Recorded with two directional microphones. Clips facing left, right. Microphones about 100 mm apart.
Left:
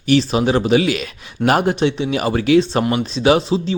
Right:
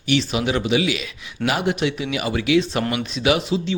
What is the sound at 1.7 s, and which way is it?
Speech, 30° left (ahead or behind).